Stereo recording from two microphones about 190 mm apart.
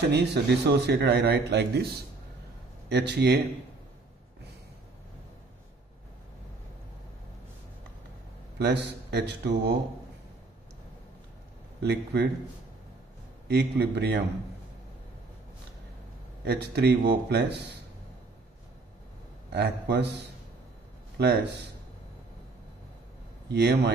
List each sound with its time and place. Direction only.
0.1 s a man's voice: 65° right (ahead or behind)
2.9 s a man's voice: 65° right (ahead or behind)
8.5 s a man's voice: 65° right (ahead or behind)
11.8 s a man's voice: 60° right (ahead or behind)
13.5 s a man's voice: 60° right (ahead or behind)
16.4 s a man's voice: 60° right (ahead or behind)
19.5 s a man's voice: 60° right (ahead or behind)
21.2 s a man's voice: 60° right (ahead or behind)
23.5 s a man's voice: 60° right (ahead or behind)